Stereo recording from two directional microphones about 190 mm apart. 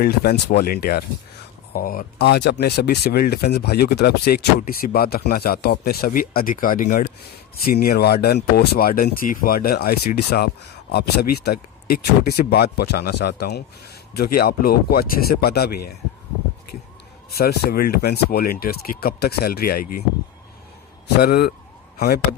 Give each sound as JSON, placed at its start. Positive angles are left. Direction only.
{"t": 0.0, "sound": "speech", "side_deg": 55}
{"t": 17.3, "sound": "speech", "side_deg": 55}
{"t": 21.2, "sound": "speech", "side_deg": 60}